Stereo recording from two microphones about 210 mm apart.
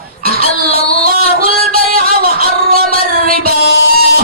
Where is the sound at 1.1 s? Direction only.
45° right (ahead or behind).